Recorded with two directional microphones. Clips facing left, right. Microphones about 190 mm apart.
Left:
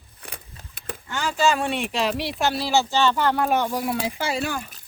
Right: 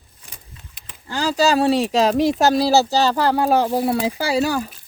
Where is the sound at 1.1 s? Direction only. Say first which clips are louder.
Right 4 dB; 35° right (ahead or behind).